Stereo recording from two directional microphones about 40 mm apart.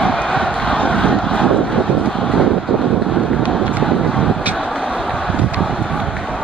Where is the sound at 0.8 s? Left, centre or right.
Left.